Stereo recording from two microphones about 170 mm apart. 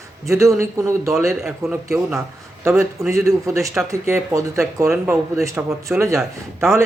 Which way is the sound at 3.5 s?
5° right (ahead or behind).